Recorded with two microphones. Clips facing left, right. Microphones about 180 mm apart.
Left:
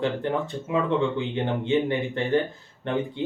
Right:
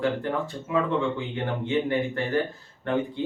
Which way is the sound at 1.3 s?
20° left (ahead or behind).